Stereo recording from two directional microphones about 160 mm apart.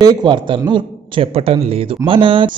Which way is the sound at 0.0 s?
30° right (ahead or behind).